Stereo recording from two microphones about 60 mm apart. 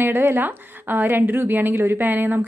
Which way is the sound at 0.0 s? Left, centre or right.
Right.